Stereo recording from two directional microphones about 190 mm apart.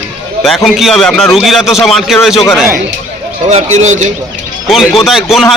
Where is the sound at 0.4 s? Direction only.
Centre (ahead or behind).